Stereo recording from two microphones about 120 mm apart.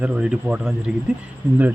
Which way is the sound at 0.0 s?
10° right (ahead or behind).